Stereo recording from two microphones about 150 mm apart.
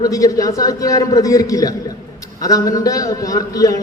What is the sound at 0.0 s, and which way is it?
A man's voice, 25° left (ahead or behind).